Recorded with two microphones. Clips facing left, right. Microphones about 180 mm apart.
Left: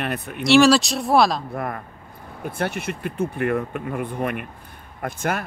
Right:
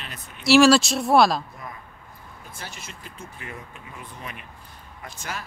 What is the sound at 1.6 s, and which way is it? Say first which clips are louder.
Speech: left 11 dB; 65° left (ahead or behind).